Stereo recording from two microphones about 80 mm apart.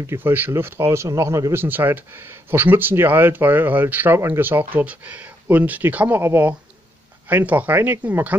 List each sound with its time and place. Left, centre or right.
0.0 s speech: right
1.6 s speech: right